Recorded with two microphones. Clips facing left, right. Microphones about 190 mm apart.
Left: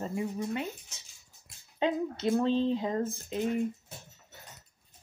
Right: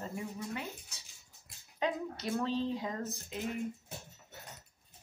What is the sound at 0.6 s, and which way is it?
Speech, 25° left (ahead or behind).